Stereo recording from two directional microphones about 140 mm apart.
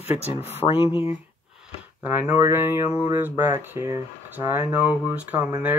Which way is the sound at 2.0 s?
15° right (ahead or behind).